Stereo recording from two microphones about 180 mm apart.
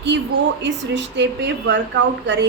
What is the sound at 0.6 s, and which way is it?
A woman's voice, 80° right.